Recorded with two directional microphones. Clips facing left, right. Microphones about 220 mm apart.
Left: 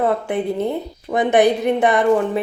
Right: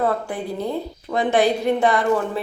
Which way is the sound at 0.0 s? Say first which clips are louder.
Left 4 dB; 20° left (ahead or behind).